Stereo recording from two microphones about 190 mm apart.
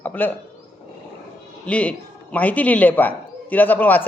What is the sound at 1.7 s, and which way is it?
A man's voice, 5° left (ahead or behind).